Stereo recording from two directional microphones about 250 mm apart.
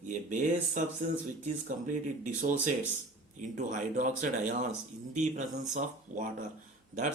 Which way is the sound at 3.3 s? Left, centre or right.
Right.